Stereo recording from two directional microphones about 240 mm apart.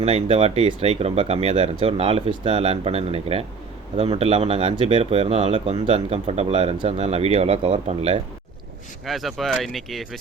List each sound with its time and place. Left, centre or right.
0.0 s speech: right
9.0 s speech: centre